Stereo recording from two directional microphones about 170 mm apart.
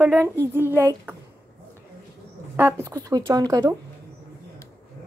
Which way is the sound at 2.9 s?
20° right (ahead or behind).